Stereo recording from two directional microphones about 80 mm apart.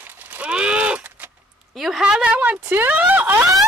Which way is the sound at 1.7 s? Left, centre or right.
Centre.